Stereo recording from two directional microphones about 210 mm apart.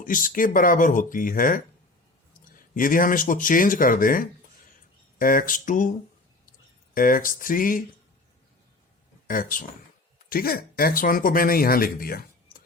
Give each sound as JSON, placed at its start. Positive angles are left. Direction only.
{"t": 0.0, "sound": "speech", "side_deg": 40}
{"t": 2.7, "sound": "speech", "side_deg": 40}
{"t": 6.9, "sound": "speech", "side_deg": 40}
{"t": 9.2, "sound": "speech", "side_deg": 40}